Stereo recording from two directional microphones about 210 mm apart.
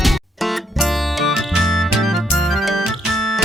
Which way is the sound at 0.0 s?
Centre (ahead or behind).